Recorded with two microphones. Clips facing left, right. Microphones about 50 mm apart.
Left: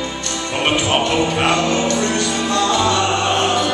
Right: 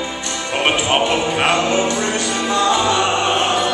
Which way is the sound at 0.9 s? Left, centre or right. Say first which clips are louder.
Even; centre.